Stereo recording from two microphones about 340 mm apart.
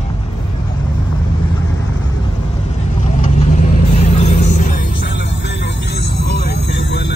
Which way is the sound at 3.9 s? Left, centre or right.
Centre.